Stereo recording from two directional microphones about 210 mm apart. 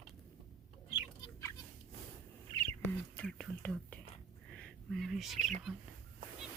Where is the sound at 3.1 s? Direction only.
5° left (ahead or behind).